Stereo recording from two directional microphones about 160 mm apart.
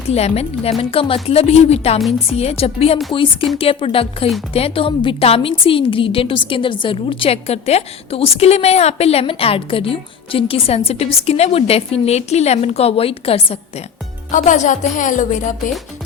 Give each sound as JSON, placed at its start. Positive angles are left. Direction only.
{"t": 0.1, "sound": "a woman's voice", "side_deg": 40}
{"t": 14.3, "sound": "speech", "side_deg": 50}